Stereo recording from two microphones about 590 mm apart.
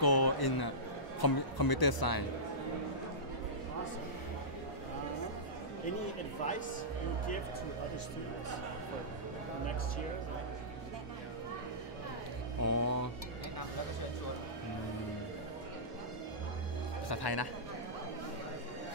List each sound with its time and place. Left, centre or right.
0.0 s a sound: left
1.2 s speech: left
12.6 s music: left
17.1 s speech: left